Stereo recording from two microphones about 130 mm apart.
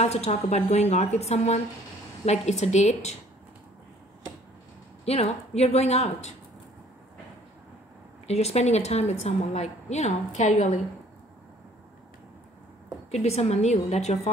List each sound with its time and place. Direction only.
0.0 s a woman's voice: 55° left (ahead or behind)
5.0 s a woman's voice: 50° left (ahead or behind)
8.3 s a woman's voice: 55° left (ahead or behind)
13.1 s a woman's voice: 55° left (ahead or behind)